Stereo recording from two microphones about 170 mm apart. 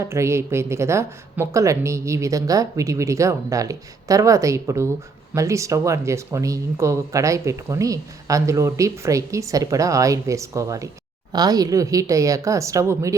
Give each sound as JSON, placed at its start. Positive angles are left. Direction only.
{"t": 0.0, "sound": "a woman's voice", "side_deg": -15}